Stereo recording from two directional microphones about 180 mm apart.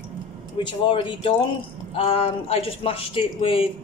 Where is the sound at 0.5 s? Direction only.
25° left (ahead or behind).